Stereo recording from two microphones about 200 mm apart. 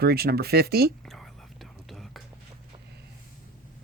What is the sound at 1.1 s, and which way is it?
Whispering, centre (ahead or behind).